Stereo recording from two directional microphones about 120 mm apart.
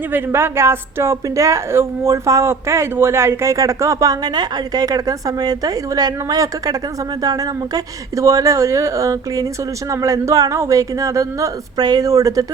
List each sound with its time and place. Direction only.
0.3 s a woman's voice: 20° right (ahead or behind)